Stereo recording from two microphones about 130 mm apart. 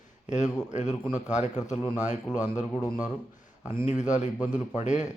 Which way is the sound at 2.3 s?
70° left (ahead or behind).